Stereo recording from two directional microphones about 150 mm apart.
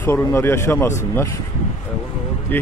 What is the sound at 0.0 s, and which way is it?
Speech, 20° left (ahead or behind).